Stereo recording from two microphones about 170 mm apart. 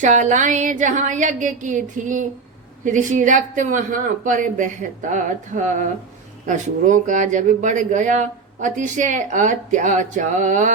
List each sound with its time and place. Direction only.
0.0 s speech: 45° right (ahead or behind)